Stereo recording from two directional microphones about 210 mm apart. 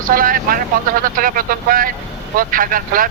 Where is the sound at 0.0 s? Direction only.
40° right (ahead or behind).